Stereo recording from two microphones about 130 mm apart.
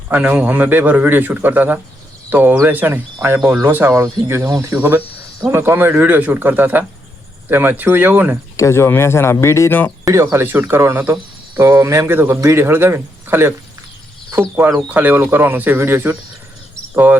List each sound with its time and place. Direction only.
0.1 s a man's voice: 10° right (ahead or behind)
4.8 s a man's voice: 15° right (ahead or behind)
8.5 s speech: 20° left (ahead or behind)
10.0 s a man's voice: 25° right (ahead or behind)